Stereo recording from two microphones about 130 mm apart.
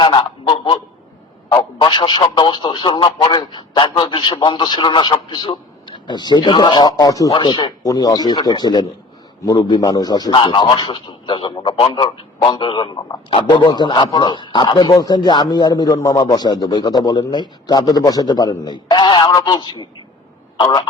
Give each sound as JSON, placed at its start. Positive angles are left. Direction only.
{"t": 0.0, "sound": "honk", "side_deg": 40}
{"t": 1.5, "sound": "a man's voice", "side_deg": 35}